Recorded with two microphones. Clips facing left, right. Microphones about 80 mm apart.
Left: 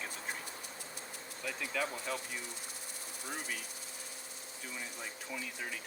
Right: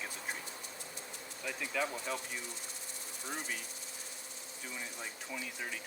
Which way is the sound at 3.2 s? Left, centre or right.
Centre.